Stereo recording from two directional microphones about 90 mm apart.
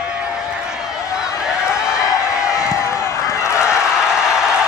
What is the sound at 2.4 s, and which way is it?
Run, 35° left (ahead or behind).